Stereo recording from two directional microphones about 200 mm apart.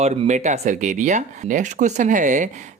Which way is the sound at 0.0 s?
35° right (ahead or behind).